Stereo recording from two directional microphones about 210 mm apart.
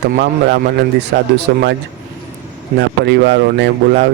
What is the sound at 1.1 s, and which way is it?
Speech, 55° right (ahead or behind).